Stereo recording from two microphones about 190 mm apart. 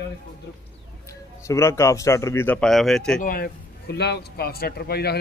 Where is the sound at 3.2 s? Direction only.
50° left (ahead or behind).